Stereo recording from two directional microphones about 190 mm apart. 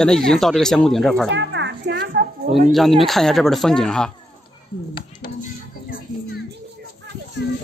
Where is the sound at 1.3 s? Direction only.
70° right (ahead or behind).